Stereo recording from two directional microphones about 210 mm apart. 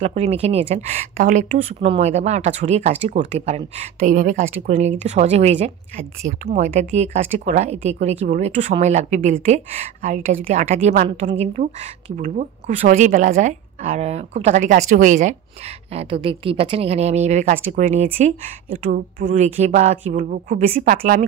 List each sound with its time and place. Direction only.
0.0 s speech: 30° right (ahead or behind)